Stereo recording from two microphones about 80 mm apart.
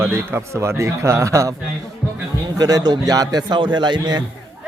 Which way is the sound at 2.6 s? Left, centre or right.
Right.